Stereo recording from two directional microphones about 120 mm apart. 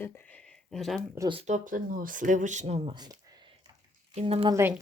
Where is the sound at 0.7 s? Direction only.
Centre (ahead or behind).